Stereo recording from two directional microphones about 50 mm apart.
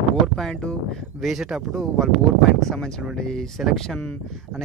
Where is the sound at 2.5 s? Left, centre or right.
Centre.